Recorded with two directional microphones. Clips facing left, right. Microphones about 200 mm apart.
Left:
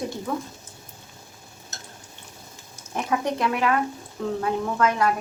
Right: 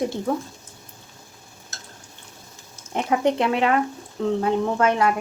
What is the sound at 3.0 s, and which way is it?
Speech, 25° right (ahead or behind).